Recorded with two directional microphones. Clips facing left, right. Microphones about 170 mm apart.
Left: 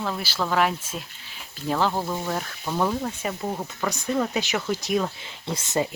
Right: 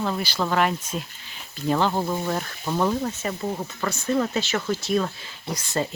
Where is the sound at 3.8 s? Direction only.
15° left (ahead or behind).